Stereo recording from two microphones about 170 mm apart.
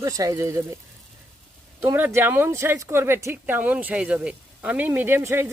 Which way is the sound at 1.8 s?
15° right (ahead or behind).